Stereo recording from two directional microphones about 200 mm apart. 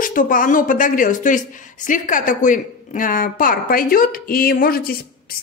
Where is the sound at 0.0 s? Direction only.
40° left (ahead or behind).